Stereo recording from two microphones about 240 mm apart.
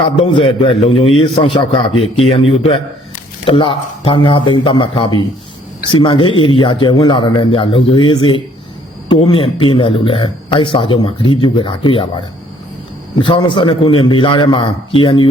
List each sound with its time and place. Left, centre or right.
0.0 s a man's voice: left
13.1 s a man's voice: centre